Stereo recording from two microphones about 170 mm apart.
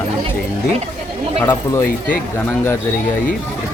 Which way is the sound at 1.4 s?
15° left (ahead or behind).